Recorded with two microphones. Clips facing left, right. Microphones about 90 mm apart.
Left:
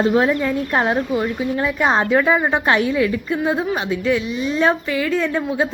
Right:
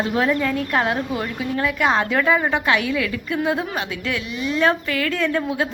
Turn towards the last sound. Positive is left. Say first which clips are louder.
# left 2 dB
turn(degrees=15)  # may be behind; listen again after turning